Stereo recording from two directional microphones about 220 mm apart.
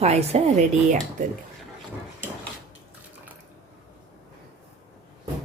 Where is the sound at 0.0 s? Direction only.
30° right (ahead or behind).